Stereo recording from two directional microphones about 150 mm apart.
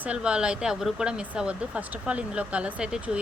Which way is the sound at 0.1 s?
5° right (ahead or behind).